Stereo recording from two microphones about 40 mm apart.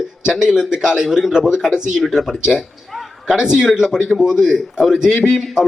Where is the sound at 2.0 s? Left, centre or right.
Centre.